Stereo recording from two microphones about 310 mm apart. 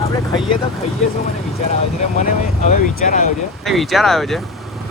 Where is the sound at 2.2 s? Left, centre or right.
Left.